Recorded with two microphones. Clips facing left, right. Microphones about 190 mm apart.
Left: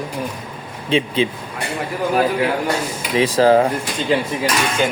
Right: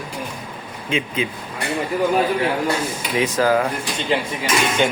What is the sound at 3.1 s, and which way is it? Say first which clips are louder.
Speech: left 5 dB; 30° left (ahead or behind).